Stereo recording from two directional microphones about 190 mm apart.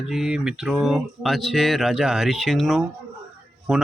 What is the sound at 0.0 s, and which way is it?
Speech, 5° right (ahead or behind).